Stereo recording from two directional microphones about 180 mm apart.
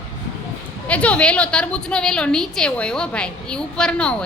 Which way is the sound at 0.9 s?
5° left (ahead or behind).